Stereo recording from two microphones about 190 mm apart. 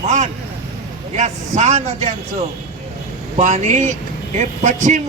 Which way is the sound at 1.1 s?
40° right (ahead or behind).